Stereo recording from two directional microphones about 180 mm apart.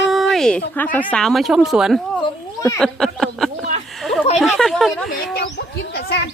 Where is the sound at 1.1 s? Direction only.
Centre (ahead or behind).